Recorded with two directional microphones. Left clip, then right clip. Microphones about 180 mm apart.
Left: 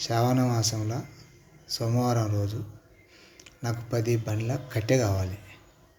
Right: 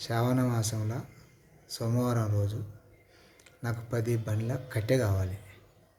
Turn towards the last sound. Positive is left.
turn(degrees=-15)  # may be behind; listen again after turning